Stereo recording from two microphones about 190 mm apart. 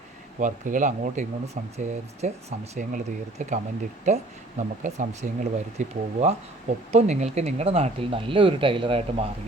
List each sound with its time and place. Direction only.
0.3 s speech: 45° right (ahead or behind)